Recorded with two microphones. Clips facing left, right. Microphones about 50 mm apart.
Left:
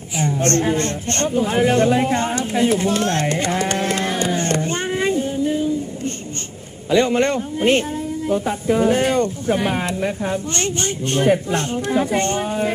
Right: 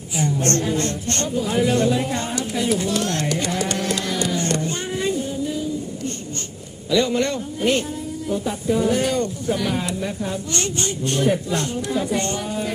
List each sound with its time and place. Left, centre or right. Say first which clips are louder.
0.2 s a woman's voice: left 3 dB; left
6.9 s speech: left 3 dB; left